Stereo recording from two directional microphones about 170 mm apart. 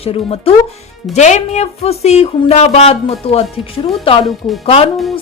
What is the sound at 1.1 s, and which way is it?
Speech, 40° left (ahead or behind).